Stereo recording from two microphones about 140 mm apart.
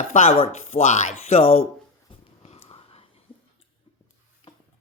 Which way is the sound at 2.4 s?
45° left (ahead or behind).